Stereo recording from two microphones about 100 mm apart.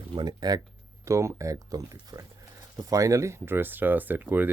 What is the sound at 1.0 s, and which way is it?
Speech, 30° right (ahead or behind).